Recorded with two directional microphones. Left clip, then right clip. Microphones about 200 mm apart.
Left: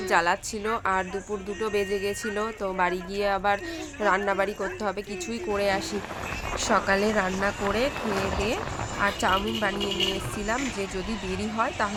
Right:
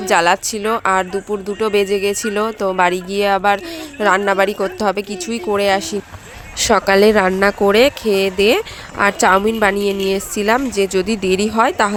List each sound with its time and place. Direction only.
0.1 s speech: 50° right (ahead or behind)